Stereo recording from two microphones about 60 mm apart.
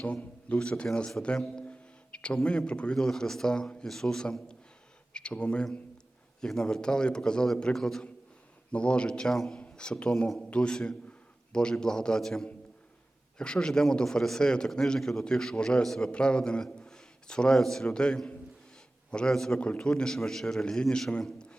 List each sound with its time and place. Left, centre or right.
0.0 s a man's voice: left
19.5 s a man's voice: centre